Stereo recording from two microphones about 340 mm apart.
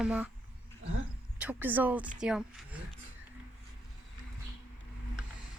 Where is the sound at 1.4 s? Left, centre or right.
Centre.